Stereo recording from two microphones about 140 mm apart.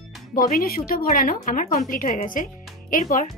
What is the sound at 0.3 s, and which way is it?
A woman's voice, 85° left.